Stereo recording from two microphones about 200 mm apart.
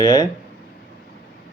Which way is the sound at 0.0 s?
20° left (ahead or behind).